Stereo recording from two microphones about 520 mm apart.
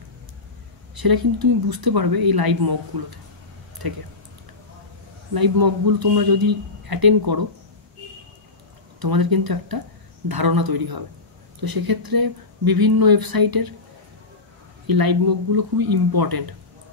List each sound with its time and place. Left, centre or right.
0.9 s speech: right
5.3 s speech: right
9.0 s speech: right
14.9 s speech: right